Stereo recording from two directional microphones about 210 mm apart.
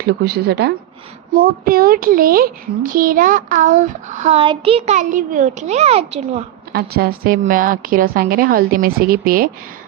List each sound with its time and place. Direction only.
0.0 s a woman's voice: 50° right (ahead or behind); by 6.4 s 30° right (ahead or behind)
6.7 s a woman's voice: 45° right (ahead or behind)